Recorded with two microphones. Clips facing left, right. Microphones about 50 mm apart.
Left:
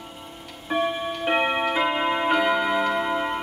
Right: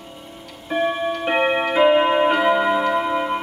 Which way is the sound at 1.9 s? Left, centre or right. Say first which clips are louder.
Right 7 dB; centre.